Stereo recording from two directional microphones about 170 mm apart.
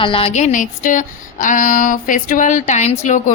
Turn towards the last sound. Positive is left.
turn(degrees=45)  # may be behind; listen again after turning